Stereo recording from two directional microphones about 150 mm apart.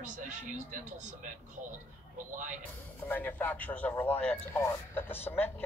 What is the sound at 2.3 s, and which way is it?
Speech, 60° right (ahead or behind).